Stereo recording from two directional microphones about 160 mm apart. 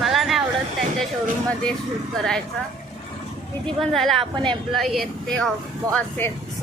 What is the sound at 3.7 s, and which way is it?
Speech, centre (ahead or behind).